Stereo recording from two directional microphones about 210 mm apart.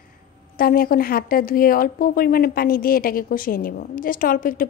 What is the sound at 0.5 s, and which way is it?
Speech, 45° left (ahead or behind).